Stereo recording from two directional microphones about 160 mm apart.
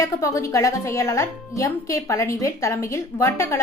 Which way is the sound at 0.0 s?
20° left (ahead or behind).